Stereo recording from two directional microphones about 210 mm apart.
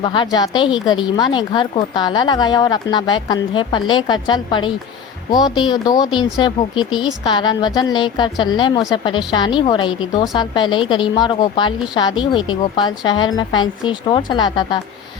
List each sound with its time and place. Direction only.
0.0 s a woman's voice: 20° left (ahead or behind)